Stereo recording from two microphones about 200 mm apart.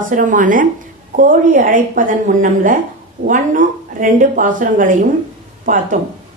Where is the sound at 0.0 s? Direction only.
40° right (ahead or behind).